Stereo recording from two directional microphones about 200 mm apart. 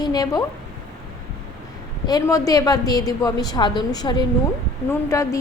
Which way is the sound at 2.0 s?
20° left (ahead or behind).